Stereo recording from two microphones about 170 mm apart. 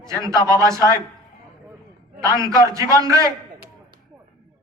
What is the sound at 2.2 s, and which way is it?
A man's voice, 20° right (ahead or behind).